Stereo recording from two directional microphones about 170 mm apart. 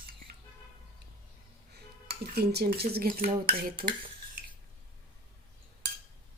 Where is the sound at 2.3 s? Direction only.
70° right (ahead or behind).